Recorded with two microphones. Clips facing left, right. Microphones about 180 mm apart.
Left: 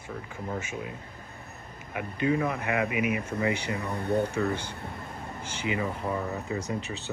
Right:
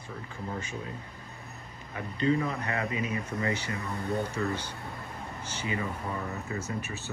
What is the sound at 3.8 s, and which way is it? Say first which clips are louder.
Speech: left 5 dB; 65° left (ahead or behind).